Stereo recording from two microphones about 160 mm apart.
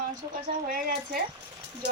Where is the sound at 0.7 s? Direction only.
60° right (ahead or behind).